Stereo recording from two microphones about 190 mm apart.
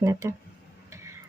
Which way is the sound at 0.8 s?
15° right (ahead or behind).